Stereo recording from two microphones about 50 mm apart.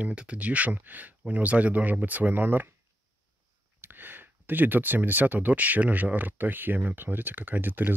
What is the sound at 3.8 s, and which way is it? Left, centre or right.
Speech, right.